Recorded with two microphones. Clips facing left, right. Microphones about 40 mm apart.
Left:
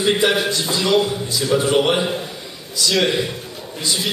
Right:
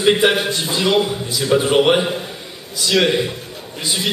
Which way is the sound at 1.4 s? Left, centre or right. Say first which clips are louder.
Right 3 dB; centre.